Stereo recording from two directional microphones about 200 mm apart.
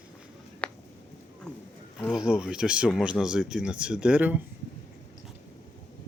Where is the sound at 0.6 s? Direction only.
5° left (ahead or behind).